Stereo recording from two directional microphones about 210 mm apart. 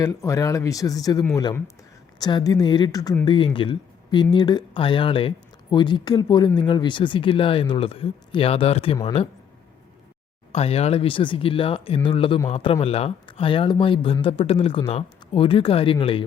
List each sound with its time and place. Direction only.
0.0 s speech: 15° left (ahead or behind)
10.5 s speech: 30° left (ahead or behind)